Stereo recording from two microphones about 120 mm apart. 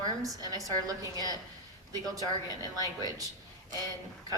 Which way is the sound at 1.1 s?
35° left (ahead or behind).